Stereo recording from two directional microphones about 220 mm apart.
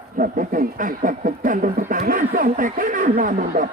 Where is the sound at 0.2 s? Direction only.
35° right (ahead or behind).